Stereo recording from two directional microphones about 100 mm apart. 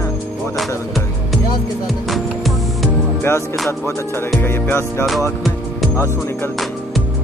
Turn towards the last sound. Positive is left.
turn(degrees=30)  # may be behind; listen again after turning